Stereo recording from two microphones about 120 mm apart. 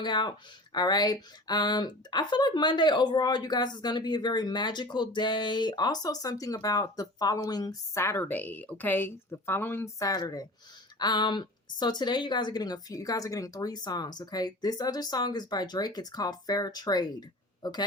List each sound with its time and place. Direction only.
0.0 s speech: 35° left (ahead or behind)